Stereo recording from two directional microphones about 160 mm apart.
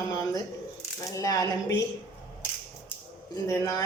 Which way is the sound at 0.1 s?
20° left (ahead or behind).